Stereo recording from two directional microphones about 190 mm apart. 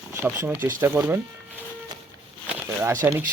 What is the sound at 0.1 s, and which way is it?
Speech, 10° right (ahead or behind).